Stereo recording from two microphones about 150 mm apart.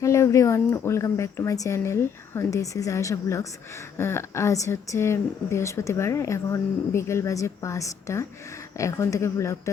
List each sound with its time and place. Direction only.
0.0 s a woman's voice: 20° left (ahead or behind)